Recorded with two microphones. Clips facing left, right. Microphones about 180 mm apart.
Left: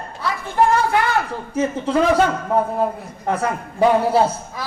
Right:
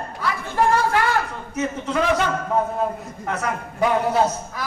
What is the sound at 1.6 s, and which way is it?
Speech, 30° left (ahead or behind).